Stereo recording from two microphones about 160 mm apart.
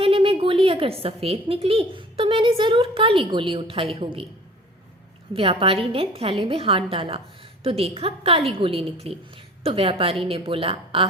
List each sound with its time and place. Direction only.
0.0 s a woman's voice: 35° right (ahead or behind)
5.3 s a woman's voice: 35° right (ahead or behind)